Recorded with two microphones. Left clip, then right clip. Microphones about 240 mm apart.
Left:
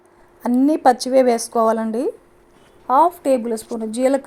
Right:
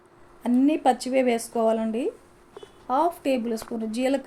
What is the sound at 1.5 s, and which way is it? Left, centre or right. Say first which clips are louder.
A woman's voice: left 6 dB; left.